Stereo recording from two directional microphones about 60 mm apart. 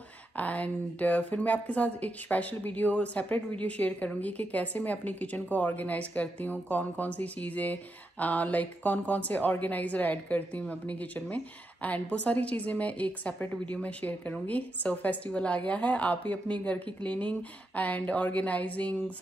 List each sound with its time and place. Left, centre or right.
0.4 s speech: left